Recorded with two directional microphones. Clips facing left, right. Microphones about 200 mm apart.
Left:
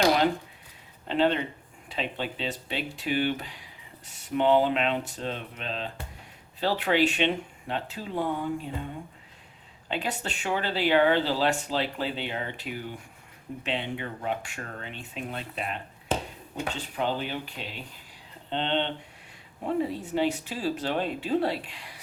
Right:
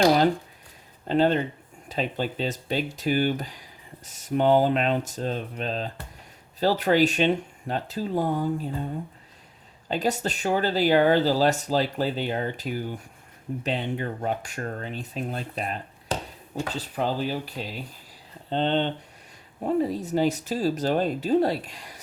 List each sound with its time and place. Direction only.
1.0 s speech: 40° right (ahead or behind)
9.9 s speech: 40° right (ahead or behind)